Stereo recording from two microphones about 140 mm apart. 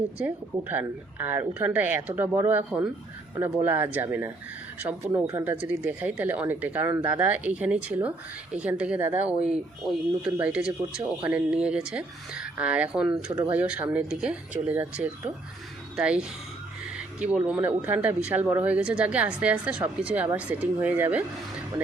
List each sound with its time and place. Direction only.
0.2 s speech: 10° right (ahead or behind)